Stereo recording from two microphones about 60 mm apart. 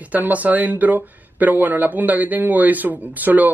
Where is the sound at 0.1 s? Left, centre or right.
Right.